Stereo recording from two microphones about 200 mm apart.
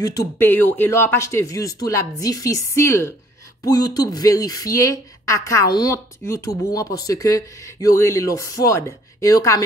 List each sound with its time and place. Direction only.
0.0 s speech: 15° left (ahead or behind)